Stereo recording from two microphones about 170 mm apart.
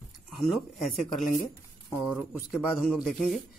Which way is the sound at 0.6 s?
Centre (ahead or behind).